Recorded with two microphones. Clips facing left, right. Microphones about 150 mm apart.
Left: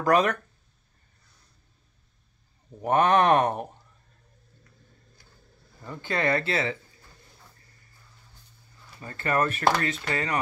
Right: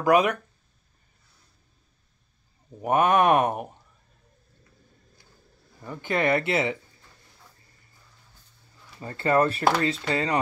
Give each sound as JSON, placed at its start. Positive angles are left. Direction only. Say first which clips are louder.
{"t": 0.0, "sound": "speech", "louder": "right 2 dB", "side_deg": -10}
{"t": 2.8, "sound": "speech", "louder": "even", "side_deg": -10}
{"t": 5.8, "sound": "speech", "louder": "right 3 dB", "side_deg": -15}
{"t": 9.0, "sound": "speech", "louder": "right 4 dB", "side_deg": -25}